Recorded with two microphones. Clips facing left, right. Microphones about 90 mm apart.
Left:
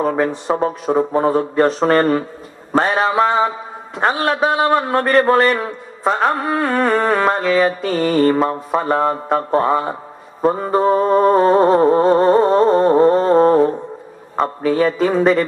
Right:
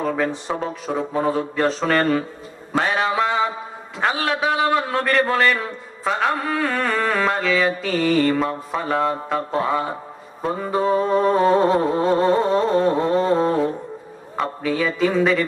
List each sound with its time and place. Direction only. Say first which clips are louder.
0.0 s speech: left 5 dB; 35° left (ahead or behind)